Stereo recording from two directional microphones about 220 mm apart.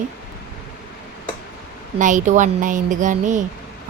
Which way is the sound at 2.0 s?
35° right (ahead or behind).